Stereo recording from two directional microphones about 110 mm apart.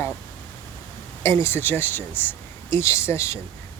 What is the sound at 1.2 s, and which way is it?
Speech, 25° left (ahead or behind).